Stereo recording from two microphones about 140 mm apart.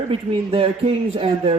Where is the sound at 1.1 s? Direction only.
40° right (ahead or behind).